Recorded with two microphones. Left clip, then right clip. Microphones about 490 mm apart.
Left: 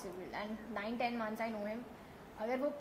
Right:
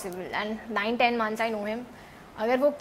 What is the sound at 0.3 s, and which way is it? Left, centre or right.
A woman's voice, right.